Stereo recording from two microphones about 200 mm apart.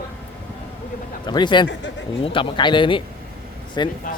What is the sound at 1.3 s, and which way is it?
Speech, 20° left (ahead or behind).